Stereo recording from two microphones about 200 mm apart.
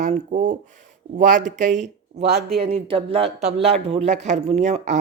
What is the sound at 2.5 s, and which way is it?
Speech, 30° right (ahead or behind).